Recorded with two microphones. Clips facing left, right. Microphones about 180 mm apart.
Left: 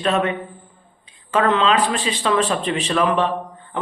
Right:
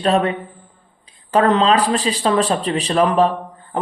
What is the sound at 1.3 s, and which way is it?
Speech, 35° right (ahead or behind).